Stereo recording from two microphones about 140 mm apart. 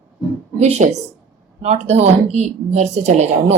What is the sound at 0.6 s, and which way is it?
Speech, 50° right (ahead or behind).